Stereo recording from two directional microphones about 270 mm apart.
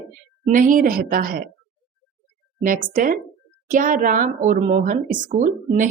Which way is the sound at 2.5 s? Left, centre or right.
Right.